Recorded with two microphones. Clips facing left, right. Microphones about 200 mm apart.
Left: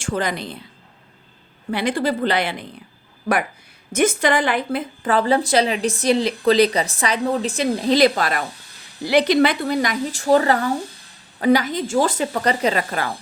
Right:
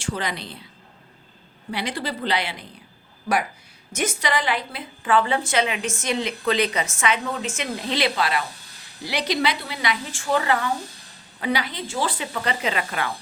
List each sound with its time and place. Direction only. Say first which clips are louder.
0.0 s a woman's voice: left 5 dB; 50° left (ahead or behind)
1.7 s a woman's voice: left 8 dB; 50° left (ahead or behind)
3.9 s a woman's voice: left 7 dB; 50° left (ahead or behind)